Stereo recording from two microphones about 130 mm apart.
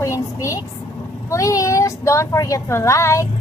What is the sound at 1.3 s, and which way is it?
Speech, 25° left (ahead or behind).